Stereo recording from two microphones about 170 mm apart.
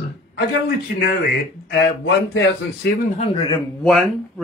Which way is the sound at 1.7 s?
80° left.